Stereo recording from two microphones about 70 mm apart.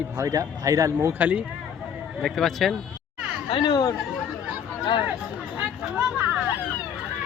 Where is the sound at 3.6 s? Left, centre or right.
Left.